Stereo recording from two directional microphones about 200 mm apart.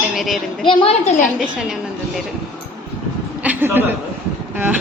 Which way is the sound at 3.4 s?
10° right (ahead or behind).